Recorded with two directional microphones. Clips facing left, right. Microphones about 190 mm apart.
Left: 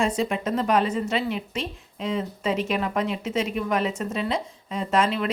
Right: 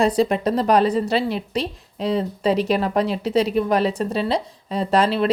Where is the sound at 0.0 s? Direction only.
35° right (ahead or behind).